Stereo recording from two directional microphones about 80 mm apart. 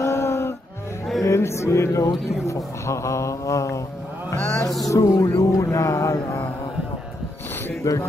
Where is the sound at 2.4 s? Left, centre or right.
Left.